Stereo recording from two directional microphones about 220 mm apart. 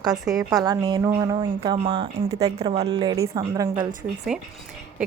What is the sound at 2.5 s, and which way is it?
A woman's voice, 30° right (ahead or behind).